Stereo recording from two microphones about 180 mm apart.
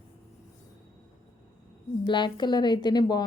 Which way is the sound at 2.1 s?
25° left (ahead or behind).